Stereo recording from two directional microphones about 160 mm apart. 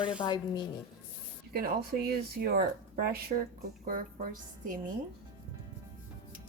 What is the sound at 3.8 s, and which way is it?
Speech, 65° right (ahead or behind).